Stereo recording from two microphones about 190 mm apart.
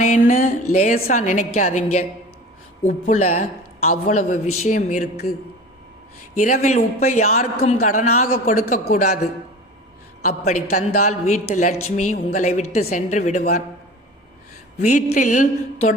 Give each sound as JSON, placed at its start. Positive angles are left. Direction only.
{"t": 0.0, "sound": "a man's voice", "side_deg": 40}
{"t": 6.4, "sound": "a man's voice", "side_deg": 35}
{"t": 10.2, "sound": "a man's voice", "side_deg": 45}
{"t": 14.8, "sound": "a man's voice", "side_deg": 40}